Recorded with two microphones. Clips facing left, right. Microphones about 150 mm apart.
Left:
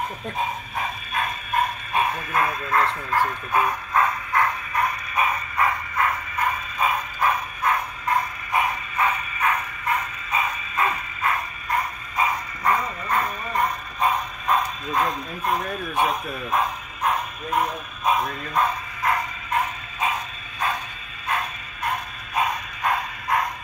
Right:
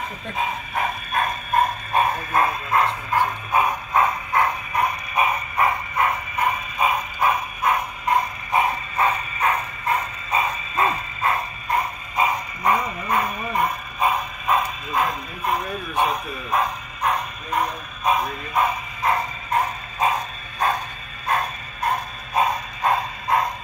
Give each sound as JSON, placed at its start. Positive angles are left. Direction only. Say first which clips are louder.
{"t": 0.7, "sound": "bow-wow", "louder": "right 5 dB", "side_deg": -55}
{"t": 2.7, "sound": "bow-wow", "louder": "even", "side_deg": -15}
{"t": 19.0, "sound": "bow-wow", "louder": "right 2 dB", "side_deg": -30}